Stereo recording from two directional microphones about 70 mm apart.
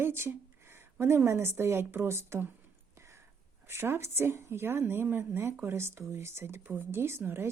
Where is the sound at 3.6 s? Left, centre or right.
Right.